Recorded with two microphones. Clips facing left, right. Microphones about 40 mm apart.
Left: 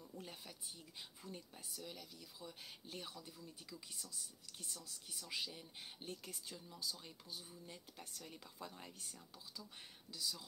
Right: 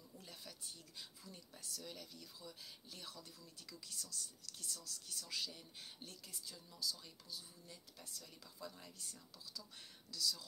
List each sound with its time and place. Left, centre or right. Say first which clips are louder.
0.3 s speech: left 1 dB; left
1.9 s speech: even; centre
2.4 s speech: left 5 dB; left
3.1 s speech: left 2 dB; centre
6.2 s speech: left 3 dB; left